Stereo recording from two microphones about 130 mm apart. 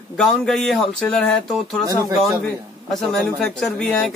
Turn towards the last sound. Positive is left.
turn(degrees=5)  # may be behind; listen again after turning